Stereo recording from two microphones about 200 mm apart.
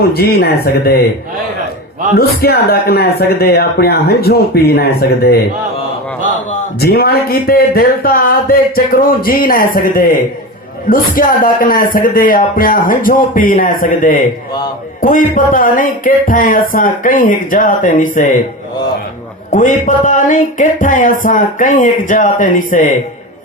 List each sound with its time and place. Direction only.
0.1 s speech: 50° left (ahead or behind)
2.1 s speech: 50° left (ahead or behind)
6.7 s speech: 50° left (ahead or behind)
19.5 s speech: 40° left (ahead or behind)